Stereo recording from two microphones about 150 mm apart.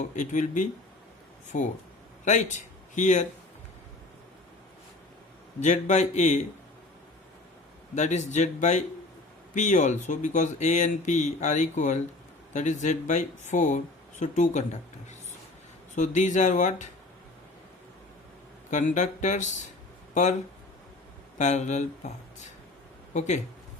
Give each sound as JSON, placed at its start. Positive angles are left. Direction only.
{"t": 0.0, "sound": "speech", "side_deg": 55}
{"t": 5.5, "sound": "speech", "side_deg": 50}
{"t": 7.9, "sound": "speech", "side_deg": 50}
{"t": 16.0, "sound": "speech", "side_deg": 55}
{"t": 18.7, "sound": "speech", "side_deg": 55}
{"t": 21.3, "sound": "speech", "side_deg": 50}